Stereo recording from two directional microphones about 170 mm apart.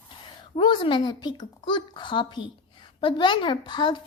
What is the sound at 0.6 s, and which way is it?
Speech, 30° left (ahead or behind).